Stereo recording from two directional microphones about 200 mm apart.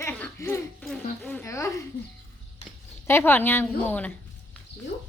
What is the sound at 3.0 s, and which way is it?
A woman's voice, 10° left (ahead or behind).